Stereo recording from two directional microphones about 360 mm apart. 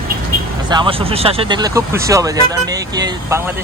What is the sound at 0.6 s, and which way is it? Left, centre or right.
Speech, centre.